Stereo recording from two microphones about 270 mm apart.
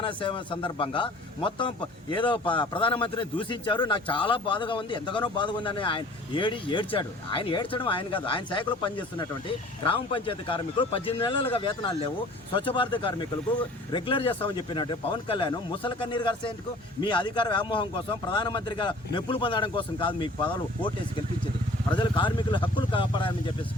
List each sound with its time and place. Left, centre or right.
0.0 s a man's voice: centre
21.9 s a man's voice: centre